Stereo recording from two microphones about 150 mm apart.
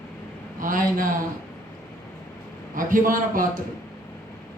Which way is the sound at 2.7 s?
65° right (ahead or behind).